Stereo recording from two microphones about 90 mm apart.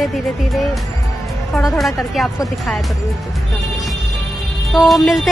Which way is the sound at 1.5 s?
Centre (ahead or behind).